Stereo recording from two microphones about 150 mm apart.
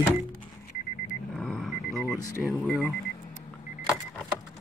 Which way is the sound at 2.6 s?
Centre (ahead or behind).